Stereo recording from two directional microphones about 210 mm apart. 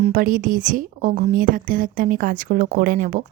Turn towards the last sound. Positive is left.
turn(degrees=-40)  # may be behind; listen again after turning